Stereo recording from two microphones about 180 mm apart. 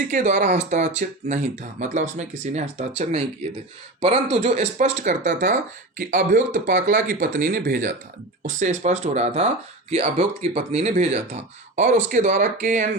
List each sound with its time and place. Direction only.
0.1 s speech: 45° right (ahead or behind)
4.0 s speech: 35° right (ahead or behind)